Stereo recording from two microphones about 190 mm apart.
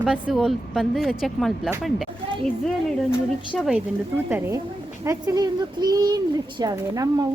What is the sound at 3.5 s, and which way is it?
Speech, centre (ahead or behind).